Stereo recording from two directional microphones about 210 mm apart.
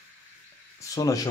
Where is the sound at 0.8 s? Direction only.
15° left (ahead or behind).